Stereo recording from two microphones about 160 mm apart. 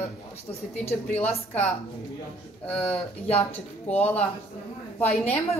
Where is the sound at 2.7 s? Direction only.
10° left (ahead or behind).